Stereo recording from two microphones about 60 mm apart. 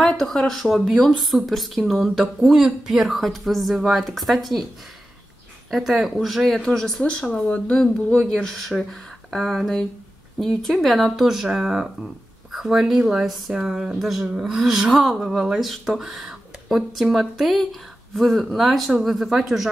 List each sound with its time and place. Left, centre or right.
0.0 s speech: centre
5.7 s a man's voice: centre
8.2 s speech: centre